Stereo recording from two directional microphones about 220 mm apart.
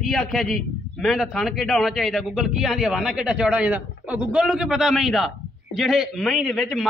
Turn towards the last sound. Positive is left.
turn(degrees=0)  # may be behind; listen again after turning